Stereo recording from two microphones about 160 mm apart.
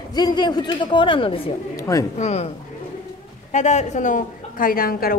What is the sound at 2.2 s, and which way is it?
Speech, 45° left (ahead or behind).